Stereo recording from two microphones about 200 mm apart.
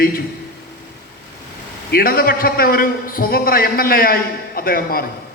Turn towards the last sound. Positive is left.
turn(degrees=45)  # may be behind; listen again after turning